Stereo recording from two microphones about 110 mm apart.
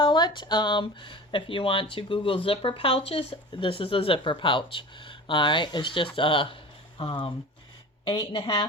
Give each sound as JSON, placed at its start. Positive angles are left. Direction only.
{"t": 0.0, "sound": "speech", "side_deg": 45}